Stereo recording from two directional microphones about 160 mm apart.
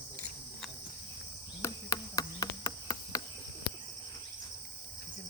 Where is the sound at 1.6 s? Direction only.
20° left (ahead or behind).